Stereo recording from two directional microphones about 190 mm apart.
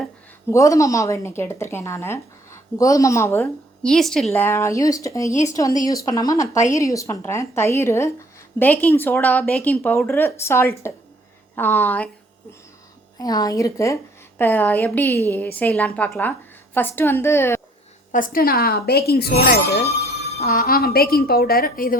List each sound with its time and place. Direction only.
0.5 s speech: 15° left (ahead or behind)
4.3 s speech: 15° left (ahead or behind)
13.1 s speech: 20° left (ahead or behind)
18.1 s a woman's voice: 45° left (ahead or behind)